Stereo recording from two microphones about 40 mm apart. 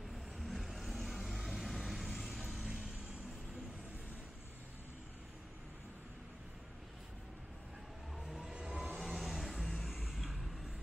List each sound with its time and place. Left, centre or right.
0.1 s vehicle: centre
2.6 s vehicle: right
8.9 s vehicle: centre